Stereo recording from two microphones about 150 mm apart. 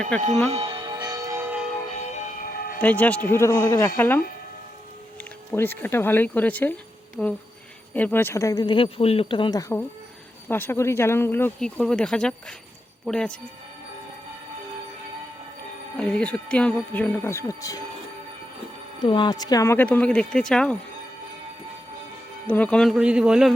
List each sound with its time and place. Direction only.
0.1 s speech: 10° left (ahead or behind)
0.5 s church bell: 35° right (ahead or behind); by 1.6 s 15° right (ahead or behind)
2.1 s siren: 60° left (ahead or behind)
2.8 s speech: 10° left (ahead or behind)
5.5 s a man's voice: 15° left (ahead or behind)
16.0 s speech: 5° left (ahead or behind); by 17.7 s 20° left (ahead or behind)
18.9 s speech: 30° left (ahead or behind); by 20.7 s 5° left (ahead or behind)
22.4 s a man's voice: 10° left (ahead or behind)